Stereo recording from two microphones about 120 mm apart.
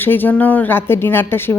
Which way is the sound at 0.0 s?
15° left (ahead or behind).